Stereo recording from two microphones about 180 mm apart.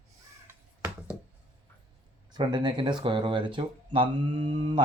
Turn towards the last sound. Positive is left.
turn(degrees=-30)  # may be behind; listen again after turning